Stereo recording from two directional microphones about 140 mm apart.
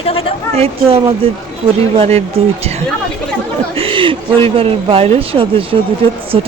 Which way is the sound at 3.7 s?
40° right (ahead or behind).